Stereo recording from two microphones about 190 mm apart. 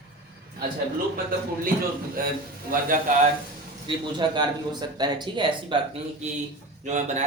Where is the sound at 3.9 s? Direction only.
25° right (ahead or behind).